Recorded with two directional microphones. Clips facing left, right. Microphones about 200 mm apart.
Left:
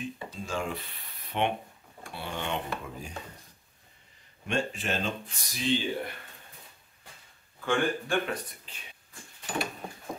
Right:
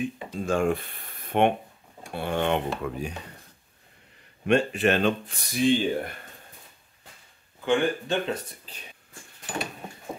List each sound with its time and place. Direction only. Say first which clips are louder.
0.4 s speech: right 10 dB; 55° right (ahead or behind)
4.5 s speech: right 9 dB; 65° right (ahead or behind)
7.6 s speech: right 4 dB; 20° right (ahead or behind)
8.7 s speech: right 4 dB; 35° right (ahead or behind)